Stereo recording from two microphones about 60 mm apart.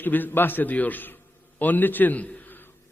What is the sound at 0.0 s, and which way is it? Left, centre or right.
A man's voice, left.